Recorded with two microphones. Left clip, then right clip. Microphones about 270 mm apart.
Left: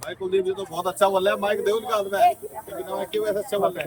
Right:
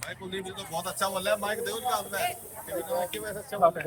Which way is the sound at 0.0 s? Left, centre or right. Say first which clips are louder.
Left 12 dB; left.